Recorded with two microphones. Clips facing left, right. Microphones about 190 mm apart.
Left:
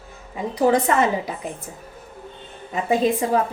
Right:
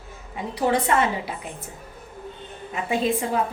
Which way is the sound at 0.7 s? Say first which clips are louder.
Left 3 dB; 40° left (ahead or behind).